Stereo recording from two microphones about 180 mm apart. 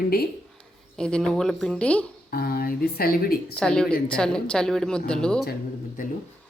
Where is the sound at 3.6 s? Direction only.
5° left (ahead or behind).